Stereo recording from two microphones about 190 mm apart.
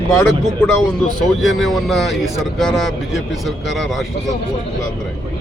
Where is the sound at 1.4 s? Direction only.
Centre (ahead or behind).